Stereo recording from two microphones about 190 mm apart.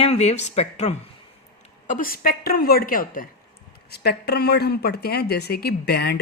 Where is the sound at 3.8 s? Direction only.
55° left (ahead or behind).